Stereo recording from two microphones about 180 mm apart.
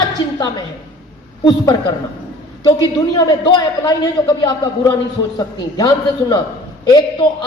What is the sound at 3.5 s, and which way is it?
A man's voice, 25° left (ahead or behind).